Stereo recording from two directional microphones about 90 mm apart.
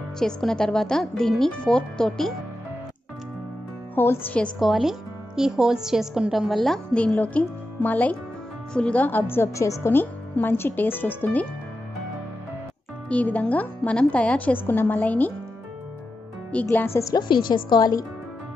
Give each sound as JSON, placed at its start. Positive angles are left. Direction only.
{"t": 0.2, "sound": "a woman's voice", "side_deg": 5}
{"t": 3.9, "sound": "speech", "side_deg": 25}
{"t": 4.6, "sound": "a woman's voice", "side_deg": 0}
{"t": 6.9, "sound": "a woman's voice", "side_deg": 15}
{"t": 13.1, "sound": "a woman's voice", "side_deg": 15}
{"t": 16.7, "sound": "speech", "side_deg": 25}
{"t": 17.1, "sound": "a woman's voice", "side_deg": 60}